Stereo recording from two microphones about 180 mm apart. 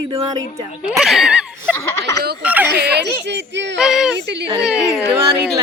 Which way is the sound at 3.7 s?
5° right (ahead or behind).